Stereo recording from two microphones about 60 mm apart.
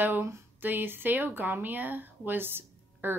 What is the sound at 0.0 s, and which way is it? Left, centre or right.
A woman's voice, right.